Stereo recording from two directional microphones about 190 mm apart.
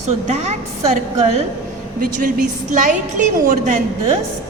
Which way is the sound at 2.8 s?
40° right (ahead or behind).